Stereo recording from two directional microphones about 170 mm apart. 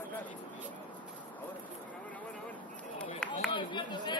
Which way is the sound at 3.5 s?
25° left (ahead or behind).